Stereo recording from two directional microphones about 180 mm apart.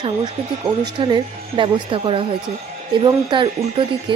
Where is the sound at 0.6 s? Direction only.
25° right (ahead or behind).